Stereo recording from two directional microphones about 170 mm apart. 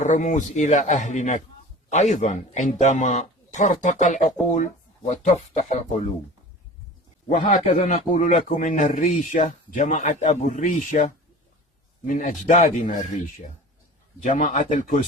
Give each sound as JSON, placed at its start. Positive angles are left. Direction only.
{"t": 0.0, "sound": "a man's voice", "side_deg": 45}
{"t": 7.4, "sound": "a man's voice", "side_deg": 50}
{"t": 14.3, "sound": "a man's voice", "side_deg": 45}